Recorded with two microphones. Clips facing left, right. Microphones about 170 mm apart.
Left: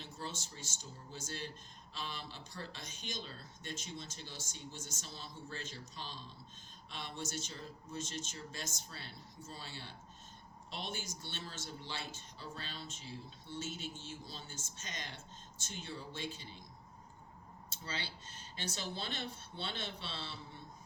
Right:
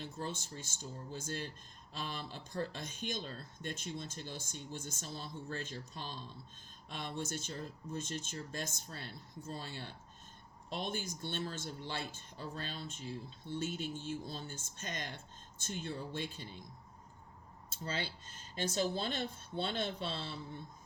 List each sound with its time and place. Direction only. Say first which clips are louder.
0.0 s speech: right 4 dB; 50° right (ahead or behind)
17.8 s speech: right 5 dB; 50° right (ahead or behind)